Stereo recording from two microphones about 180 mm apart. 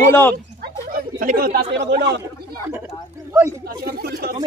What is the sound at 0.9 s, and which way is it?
Speech, 55° right (ahead or behind).